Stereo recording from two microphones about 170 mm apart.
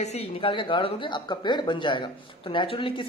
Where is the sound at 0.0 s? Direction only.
35° left (ahead or behind).